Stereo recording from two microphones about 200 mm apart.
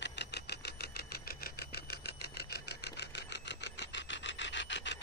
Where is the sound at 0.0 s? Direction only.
60° left (ahead or behind).